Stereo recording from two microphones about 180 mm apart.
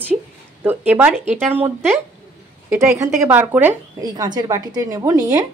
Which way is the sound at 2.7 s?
15° right (ahead or behind).